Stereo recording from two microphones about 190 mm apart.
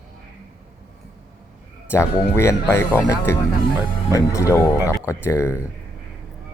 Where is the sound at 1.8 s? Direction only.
15° left (ahead or behind).